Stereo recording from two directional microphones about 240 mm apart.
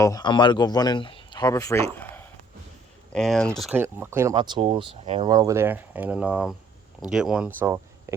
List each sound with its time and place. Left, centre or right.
0.0 s speech: centre